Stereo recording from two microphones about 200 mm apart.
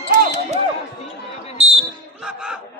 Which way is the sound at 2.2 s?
5° right (ahead or behind).